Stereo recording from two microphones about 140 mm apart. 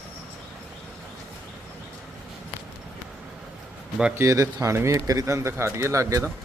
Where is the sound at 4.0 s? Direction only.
20° right (ahead or behind).